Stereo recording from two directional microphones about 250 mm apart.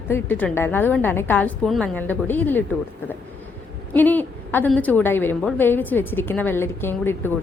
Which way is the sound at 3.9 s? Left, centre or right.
Centre.